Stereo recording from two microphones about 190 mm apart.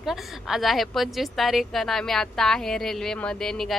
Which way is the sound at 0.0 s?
Centre (ahead or behind).